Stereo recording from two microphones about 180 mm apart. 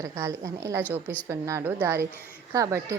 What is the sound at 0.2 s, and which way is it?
A woman's voice, 15° right (ahead or behind).